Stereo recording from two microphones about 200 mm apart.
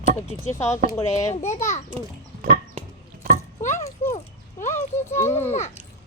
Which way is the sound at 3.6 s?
40° left (ahead or behind).